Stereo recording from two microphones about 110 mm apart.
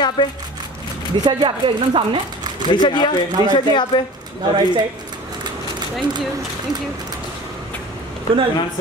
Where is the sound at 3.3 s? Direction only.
40° right (ahead or behind).